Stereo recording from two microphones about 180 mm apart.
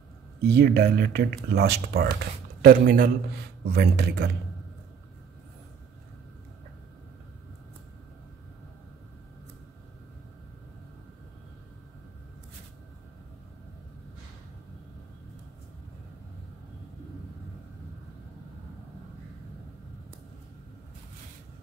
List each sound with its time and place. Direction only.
0.4 s a man's voice: 65° right (ahead or behind)
3.6 s a man's voice: 65° right (ahead or behind)